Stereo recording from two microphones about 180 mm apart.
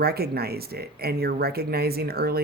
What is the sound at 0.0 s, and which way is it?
Speech, 60° right (ahead or behind).